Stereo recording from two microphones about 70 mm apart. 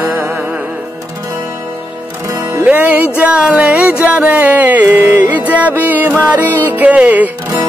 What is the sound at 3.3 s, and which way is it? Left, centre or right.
Music, centre.